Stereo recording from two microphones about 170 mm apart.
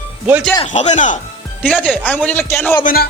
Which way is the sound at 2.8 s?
65° left (ahead or behind).